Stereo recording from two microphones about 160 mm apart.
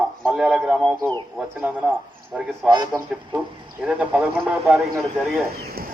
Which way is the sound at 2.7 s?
25° right (ahead or behind).